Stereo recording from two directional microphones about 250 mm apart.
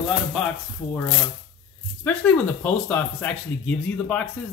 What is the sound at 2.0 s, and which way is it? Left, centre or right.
Speech, centre.